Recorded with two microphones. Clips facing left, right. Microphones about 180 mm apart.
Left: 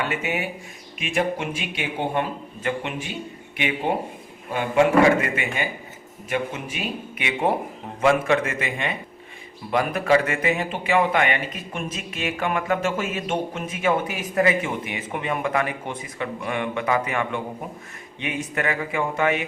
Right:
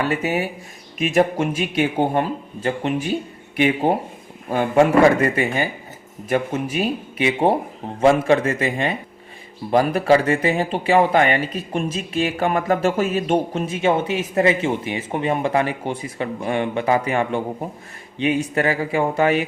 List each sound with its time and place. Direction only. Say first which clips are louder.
0.0 s speech: right 5 dB; 35° right (ahead or behind)